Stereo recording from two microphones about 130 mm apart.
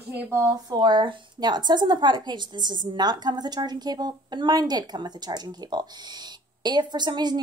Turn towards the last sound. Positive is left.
turn(degrees=-35)  # may be behind; listen again after turning